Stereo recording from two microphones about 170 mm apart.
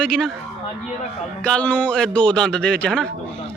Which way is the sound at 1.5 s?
5° left (ahead or behind).